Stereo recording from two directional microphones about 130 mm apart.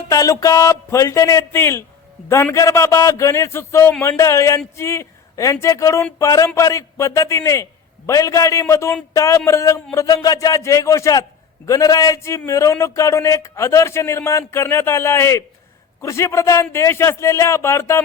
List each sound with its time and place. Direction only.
0.1 s speech: 25° left (ahead or behind)